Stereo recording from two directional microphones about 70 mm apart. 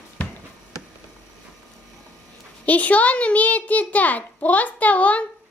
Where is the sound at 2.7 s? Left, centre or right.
Left.